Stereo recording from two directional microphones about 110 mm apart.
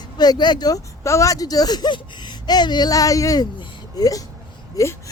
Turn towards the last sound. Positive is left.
turn(degrees=30)  # may be behind; listen again after turning